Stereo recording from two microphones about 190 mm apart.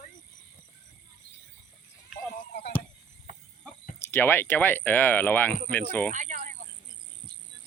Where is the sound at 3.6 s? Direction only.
10° left (ahead or behind).